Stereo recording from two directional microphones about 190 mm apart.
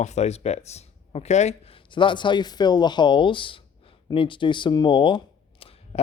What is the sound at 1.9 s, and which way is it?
Speech, 25° left (ahead or behind).